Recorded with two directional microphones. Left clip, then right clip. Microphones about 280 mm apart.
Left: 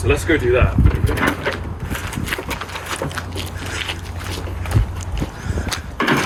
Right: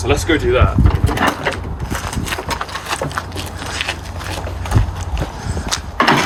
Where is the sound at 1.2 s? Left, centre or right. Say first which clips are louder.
Right 3 dB; right.